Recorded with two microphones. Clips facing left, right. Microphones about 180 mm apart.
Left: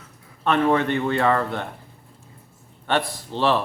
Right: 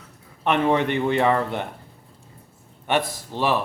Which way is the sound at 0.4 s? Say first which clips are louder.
Left 1 dB; 15° right (ahead or behind).